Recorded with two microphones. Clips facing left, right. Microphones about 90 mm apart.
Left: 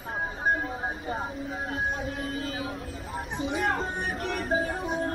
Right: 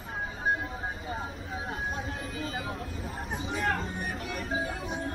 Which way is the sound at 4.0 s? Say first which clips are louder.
Left 4 dB; 60° left (ahead or behind).